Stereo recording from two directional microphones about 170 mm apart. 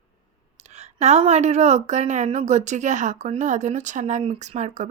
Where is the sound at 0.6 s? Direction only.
40° right (ahead or behind).